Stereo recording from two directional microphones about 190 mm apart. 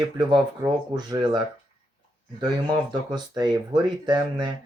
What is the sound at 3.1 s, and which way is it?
Speech, 20° right (ahead or behind).